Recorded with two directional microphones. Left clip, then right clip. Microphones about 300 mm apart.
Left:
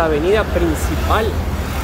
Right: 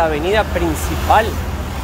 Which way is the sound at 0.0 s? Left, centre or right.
Centre.